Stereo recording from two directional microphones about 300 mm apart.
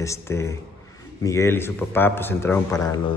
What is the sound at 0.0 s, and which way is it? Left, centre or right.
A man's voice, centre.